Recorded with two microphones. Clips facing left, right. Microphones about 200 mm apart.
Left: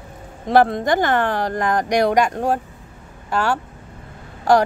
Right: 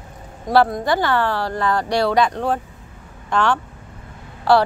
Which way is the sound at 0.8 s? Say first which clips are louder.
Left 1 dB; 45° left (ahead or behind).